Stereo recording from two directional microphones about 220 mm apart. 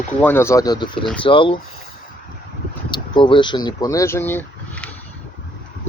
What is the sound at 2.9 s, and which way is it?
Speech, 20° left (ahead or behind).